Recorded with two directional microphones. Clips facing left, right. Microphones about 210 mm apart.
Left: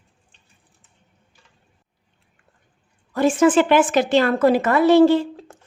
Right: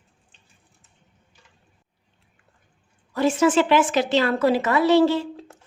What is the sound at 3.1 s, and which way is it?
A woman's voice, 50° left (ahead or behind).